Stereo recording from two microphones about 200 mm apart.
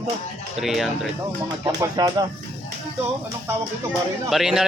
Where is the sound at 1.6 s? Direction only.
20° right (ahead or behind).